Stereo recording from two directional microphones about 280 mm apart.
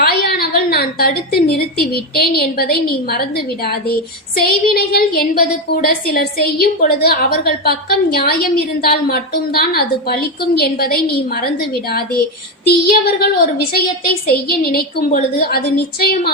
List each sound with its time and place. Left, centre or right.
0.0 s a sound: left
1.8 s a woman's voice: left
14.4 s a woman's voice: left